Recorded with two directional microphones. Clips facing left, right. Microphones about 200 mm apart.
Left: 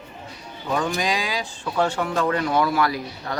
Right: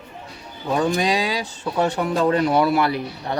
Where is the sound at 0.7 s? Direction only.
30° right (ahead or behind).